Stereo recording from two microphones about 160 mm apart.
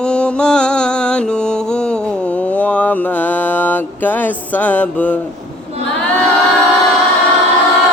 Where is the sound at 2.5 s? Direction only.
10° left (ahead or behind).